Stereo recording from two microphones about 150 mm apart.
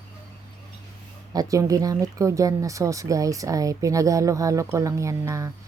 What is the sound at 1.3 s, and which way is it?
Speech, 25° right (ahead or behind).